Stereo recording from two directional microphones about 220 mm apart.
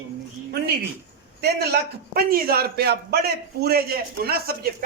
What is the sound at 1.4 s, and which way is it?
A man's voice, 45° right (ahead or behind).